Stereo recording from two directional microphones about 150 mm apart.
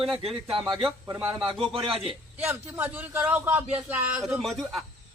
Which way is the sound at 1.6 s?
40° right (ahead or behind).